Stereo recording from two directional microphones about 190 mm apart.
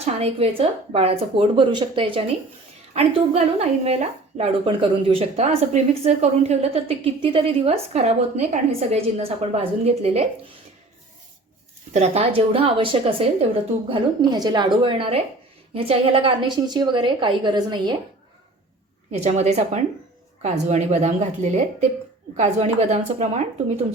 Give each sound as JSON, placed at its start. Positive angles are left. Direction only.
{"t": 0.0, "sound": "a woman's voice", "side_deg": -30}
{"t": 11.9, "sound": "a woman's voice", "side_deg": -30}
{"t": 19.1, "sound": "a woman's voice", "side_deg": -35}